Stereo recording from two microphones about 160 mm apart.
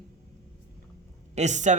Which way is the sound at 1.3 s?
45° right (ahead or behind).